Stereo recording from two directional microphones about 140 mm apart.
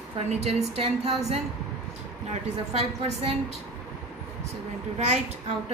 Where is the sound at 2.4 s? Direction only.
50° right (ahead or behind).